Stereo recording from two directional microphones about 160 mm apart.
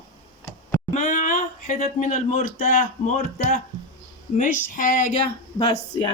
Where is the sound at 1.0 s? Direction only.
55° left (ahead or behind).